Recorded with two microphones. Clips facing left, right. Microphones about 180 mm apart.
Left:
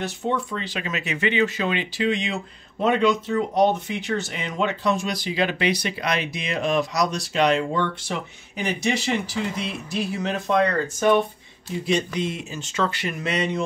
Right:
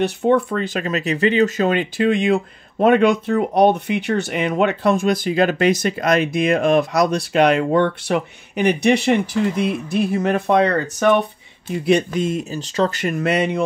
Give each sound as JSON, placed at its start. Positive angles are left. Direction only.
{"t": 0.0, "sound": "speech", "side_deg": -60}
{"t": 11.8, "sound": "speech", "side_deg": -55}